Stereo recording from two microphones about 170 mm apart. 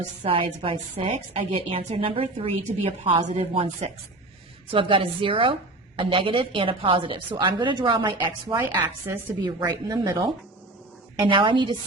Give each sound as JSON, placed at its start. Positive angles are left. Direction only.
{"t": 0.2, "sound": "a woman's voice", "side_deg": -30}
{"t": 3.5, "sound": "a woman's voice", "side_deg": -35}
{"t": 8.4, "sound": "a woman's voice", "side_deg": -15}
{"t": 11.3, "sound": "speech", "side_deg": -30}